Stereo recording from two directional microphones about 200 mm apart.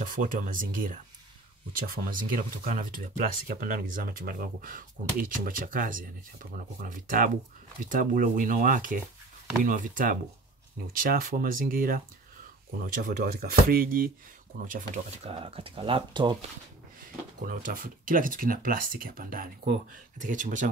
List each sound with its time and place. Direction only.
0.0 s speech: 40° right (ahead or behind)
13.0 s speech: 45° right (ahead or behind); by 16.4 s 25° right (ahead or behind)
17.5 s speech: 45° right (ahead or behind)